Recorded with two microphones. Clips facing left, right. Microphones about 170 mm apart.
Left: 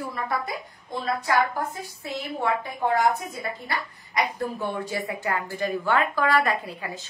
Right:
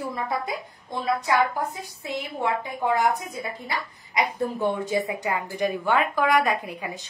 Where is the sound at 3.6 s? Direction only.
20° right (ahead or behind).